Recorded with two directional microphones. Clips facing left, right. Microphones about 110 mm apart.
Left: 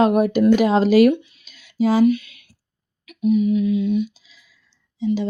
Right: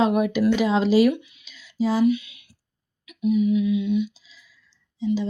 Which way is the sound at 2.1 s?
50° left (ahead or behind).